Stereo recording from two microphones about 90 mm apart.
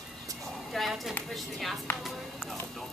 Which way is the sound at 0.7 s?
Centre (ahead or behind).